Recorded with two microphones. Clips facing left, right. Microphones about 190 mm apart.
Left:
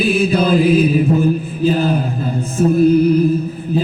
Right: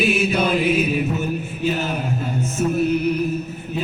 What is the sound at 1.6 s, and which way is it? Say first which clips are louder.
Music: left 8 dB; 35° left (ahead or behind).